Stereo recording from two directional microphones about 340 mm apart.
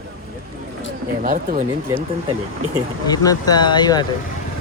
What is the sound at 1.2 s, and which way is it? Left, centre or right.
Speech, right.